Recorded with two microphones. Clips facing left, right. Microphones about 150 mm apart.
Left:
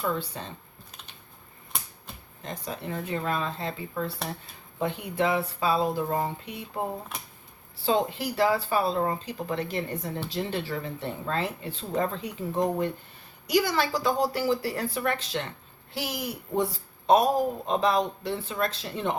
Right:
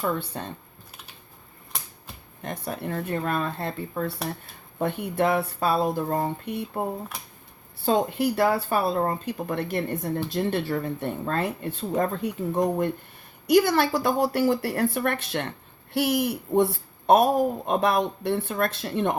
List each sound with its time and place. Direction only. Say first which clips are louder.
0.2 s speech: right 2 dB; 55° right (ahead or behind)
2.4 s speech: right 4 dB; 55° right (ahead or behind)
7.8 s speech: right 3 dB; 55° right (ahead or behind)